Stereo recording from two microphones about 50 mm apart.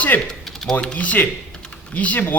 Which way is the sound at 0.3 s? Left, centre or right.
Centre.